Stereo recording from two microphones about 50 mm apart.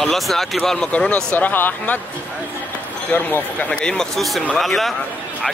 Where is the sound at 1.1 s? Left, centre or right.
Left.